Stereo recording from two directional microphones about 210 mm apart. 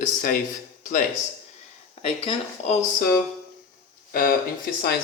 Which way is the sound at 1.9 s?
25° left (ahead or behind).